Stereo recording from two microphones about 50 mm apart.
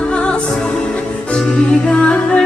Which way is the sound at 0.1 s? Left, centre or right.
Left.